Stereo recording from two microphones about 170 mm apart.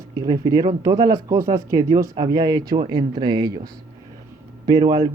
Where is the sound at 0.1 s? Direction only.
20° right (ahead or behind).